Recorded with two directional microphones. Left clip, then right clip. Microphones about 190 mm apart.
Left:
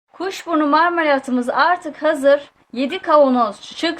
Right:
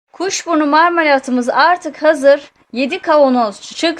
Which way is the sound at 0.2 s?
35° right (ahead or behind).